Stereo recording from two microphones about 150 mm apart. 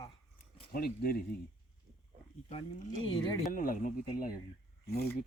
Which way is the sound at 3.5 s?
65° left (ahead or behind).